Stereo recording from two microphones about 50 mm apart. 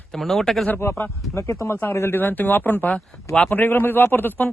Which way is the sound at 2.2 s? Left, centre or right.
Left.